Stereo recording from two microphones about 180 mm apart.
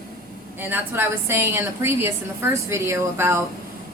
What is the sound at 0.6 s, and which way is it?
A woman's voice, 10° right (ahead or behind).